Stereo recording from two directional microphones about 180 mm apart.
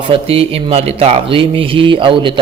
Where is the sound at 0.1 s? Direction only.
35° right (ahead or behind).